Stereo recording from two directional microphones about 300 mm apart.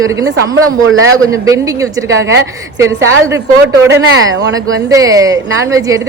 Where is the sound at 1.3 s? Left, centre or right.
Centre.